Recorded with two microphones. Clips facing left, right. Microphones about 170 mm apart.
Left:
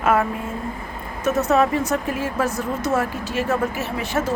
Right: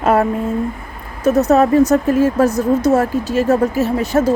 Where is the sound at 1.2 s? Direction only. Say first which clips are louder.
Right 6 dB; 35° right (ahead or behind).